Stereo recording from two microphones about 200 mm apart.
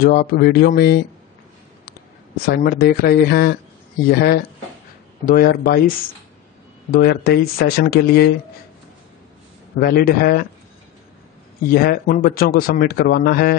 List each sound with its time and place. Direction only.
0.0 s speech: 45° left (ahead or behind)
6.9 s speech: 50° left (ahead or behind)
9.8 s speech: 50° left (ahead or behind)
11.7 s speech: 50° left (ahead or behind)